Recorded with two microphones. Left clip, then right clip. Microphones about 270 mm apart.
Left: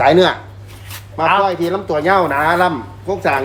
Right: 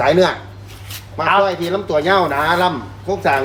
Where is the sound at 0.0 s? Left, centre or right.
Centre.